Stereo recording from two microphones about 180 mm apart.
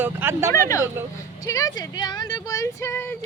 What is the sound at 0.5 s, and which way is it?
A woman's voice, 15° left (ahead or behind).